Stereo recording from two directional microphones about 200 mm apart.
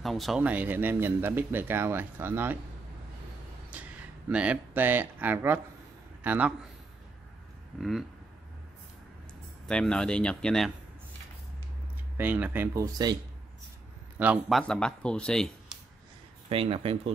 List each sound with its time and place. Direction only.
0.0 s speech: centre (ahead or behind)
3.7 s speech: 5° right (ahead or behind)
9.7 s speech: 5° left (ahead or behind)
12.2 s speech: 10° right (ahead or behind)
14.1 s a man's voice: 5° right (ahead or behind)
14.6 s speech: 5° left (ahead or behind)
16.4 s speech: 25° right (ahead or behind)